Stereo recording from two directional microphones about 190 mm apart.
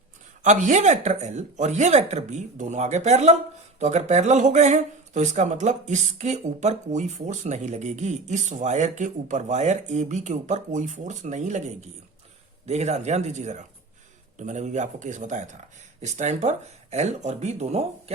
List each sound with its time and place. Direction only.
0.4 s speech: 40° right (ahead or behind)